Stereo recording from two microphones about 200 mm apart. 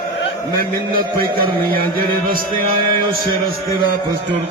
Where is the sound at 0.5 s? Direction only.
45° right (ahead or behind).